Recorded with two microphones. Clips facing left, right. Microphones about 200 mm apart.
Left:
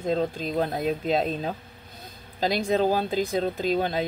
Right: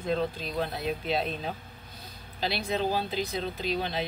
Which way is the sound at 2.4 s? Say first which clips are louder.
Left 6 dB; 45° left (ahead or behind).